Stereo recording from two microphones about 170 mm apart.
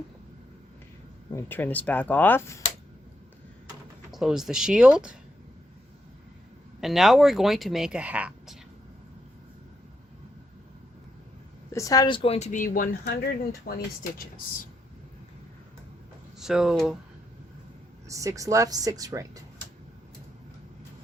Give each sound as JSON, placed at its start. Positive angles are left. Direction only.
{"t": 1.3, "sound": "speech", "side_deg": 15}
{"t": 4.1, "sound": "speech", "side_deg": -5}
{"t": 6.8, "sound": "speech", "side_deg": 0}
{"t": 11.7, "sound": "speech", "side_deg": 20}
{"t": 12.5, "sound": "speech", "side_deg": 50}
{"t": 16.4, "sound": "speech", "side_deg": -5}
{"t": 18.1, "sound": "speech", "side_deg": -20}